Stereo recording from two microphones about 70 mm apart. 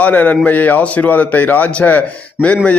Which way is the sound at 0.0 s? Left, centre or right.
Left.